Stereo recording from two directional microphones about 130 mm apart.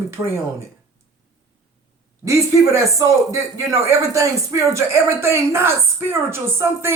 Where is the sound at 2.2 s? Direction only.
25° right (ahead or behind).